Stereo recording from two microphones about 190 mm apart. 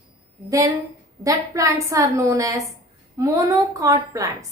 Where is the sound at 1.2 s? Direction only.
15° right (ahead or behind).